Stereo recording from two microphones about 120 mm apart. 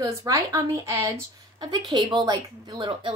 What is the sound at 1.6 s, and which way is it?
A woman's voice, 40° right (ahead or behind).